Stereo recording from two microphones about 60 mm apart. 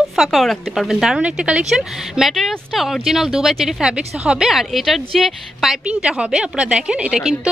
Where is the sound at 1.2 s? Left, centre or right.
Centre.